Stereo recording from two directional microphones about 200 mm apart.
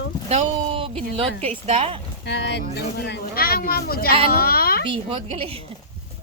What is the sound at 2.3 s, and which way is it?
A child's voice, 60° left (ahead or behind).